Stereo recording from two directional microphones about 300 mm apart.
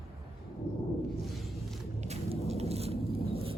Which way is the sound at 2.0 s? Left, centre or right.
Right.